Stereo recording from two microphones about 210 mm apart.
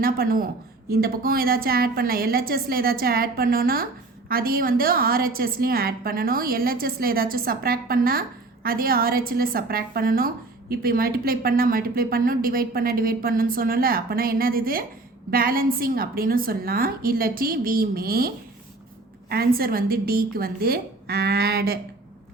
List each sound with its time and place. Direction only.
0.0 s a woman's voice: 45° right (ahead or behind)
19.3 s a woman's voice: 45° right (ahead or behind)